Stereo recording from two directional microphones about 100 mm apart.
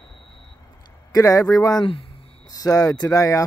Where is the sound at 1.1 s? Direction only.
35° left (ahead or behind).